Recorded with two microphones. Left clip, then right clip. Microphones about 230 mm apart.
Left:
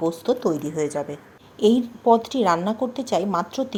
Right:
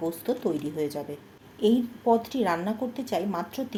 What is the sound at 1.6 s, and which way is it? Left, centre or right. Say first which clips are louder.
A woman's voice: left 5 dB; left.